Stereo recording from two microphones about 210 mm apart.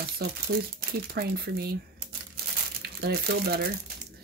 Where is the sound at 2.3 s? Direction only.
50° right (ahead or behind).